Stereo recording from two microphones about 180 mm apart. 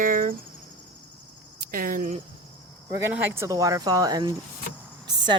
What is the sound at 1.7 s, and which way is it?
Speech, 50° right (ahead or behind).